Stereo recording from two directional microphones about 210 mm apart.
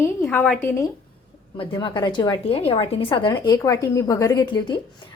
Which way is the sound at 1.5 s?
20° left (ahead or behind).